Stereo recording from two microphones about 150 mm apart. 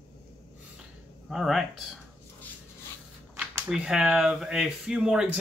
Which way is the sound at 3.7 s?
5° right (ahead or behind).